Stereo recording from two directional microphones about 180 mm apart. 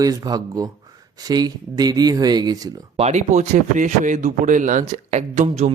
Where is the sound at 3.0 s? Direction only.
40° right (ahead or behind).